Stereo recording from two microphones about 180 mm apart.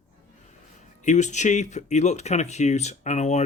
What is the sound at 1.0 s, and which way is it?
Speech, 40° left (ahead or behind).